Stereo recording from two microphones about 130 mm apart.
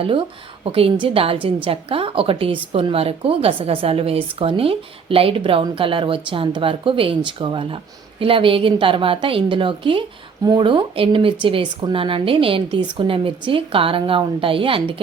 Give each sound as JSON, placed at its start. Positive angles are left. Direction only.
{"t": 0.0, "sound": "a woman's voice", "side_deg": -40}